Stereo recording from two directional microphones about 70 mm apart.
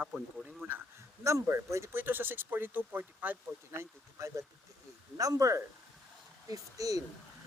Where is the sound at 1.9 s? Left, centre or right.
Right.